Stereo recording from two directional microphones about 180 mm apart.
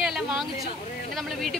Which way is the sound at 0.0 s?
5° right (ahead or behind).